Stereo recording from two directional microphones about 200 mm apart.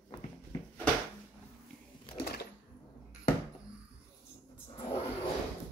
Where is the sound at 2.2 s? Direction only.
55° left (ahead or behind).